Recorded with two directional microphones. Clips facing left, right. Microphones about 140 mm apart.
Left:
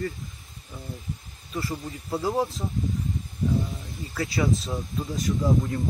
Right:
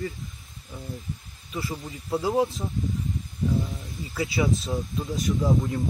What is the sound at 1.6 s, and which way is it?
Speech, centre (ahead or behind).